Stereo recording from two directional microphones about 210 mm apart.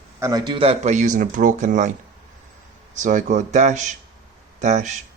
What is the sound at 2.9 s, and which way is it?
Speech, 35° right (ahead or behind).